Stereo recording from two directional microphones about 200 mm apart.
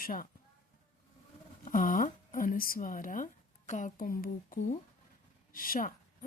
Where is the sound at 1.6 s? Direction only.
40° left (ahead or behind).